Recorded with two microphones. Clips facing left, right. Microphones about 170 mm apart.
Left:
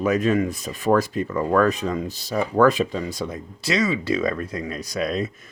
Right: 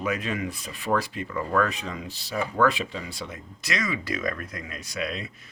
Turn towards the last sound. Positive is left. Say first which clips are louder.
# left 7 dB
turn(degrees=40)  # may be behind; listen again after turning